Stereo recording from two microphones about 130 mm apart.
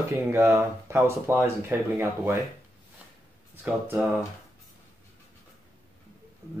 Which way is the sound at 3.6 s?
10° right (ahead or behind).